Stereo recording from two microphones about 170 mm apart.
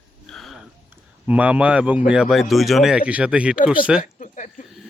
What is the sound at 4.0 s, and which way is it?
Speech, 45° left (ahead or behind).